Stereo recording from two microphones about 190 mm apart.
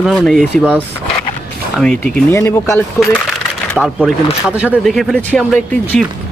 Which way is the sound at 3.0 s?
Centre (ahead or behind).